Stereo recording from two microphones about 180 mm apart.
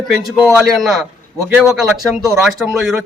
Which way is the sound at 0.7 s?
Centre (ahead or behind).